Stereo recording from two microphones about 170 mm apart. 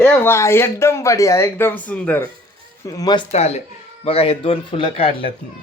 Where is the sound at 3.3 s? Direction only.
40° left (ahead or behind).